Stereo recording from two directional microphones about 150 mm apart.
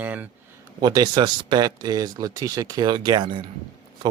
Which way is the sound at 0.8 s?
30° right (ahead or behind).